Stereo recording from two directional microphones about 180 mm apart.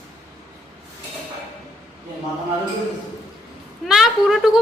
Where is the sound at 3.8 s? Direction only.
5° right (ahead or behind).